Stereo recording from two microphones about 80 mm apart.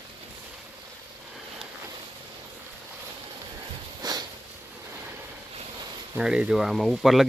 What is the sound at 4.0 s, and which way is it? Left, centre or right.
Sniff, right.